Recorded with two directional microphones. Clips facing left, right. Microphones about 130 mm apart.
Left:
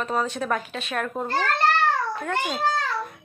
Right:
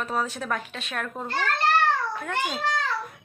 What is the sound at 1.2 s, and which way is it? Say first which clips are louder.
Speech: left 2 dB; 40° left (ahead or behind).